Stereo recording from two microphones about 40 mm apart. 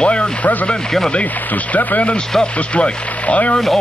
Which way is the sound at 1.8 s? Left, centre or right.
Left.